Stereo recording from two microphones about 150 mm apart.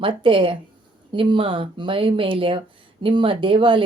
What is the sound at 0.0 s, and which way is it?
Speech, 35° right (ahead or behind).